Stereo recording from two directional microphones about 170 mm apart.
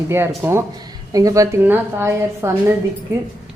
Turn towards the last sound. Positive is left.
turn(degrees=-15)  # may be behind; listen again after turning